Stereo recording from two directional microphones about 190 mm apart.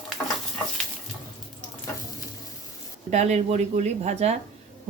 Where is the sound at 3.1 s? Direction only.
35° right (ahead or behind).